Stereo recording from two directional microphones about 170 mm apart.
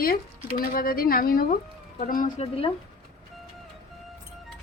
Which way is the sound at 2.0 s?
50° left (ahead or behind).